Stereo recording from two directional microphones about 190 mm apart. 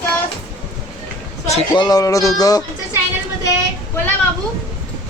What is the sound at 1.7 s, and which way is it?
Music, 20° left (ahead or behind).